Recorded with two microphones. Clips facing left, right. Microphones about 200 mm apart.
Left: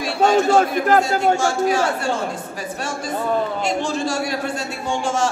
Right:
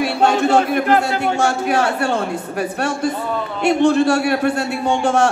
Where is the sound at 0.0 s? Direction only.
60° right (ahead or behind).